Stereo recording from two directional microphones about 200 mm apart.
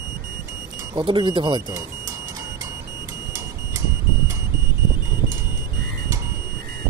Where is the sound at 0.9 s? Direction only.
25° right (ahead or behind).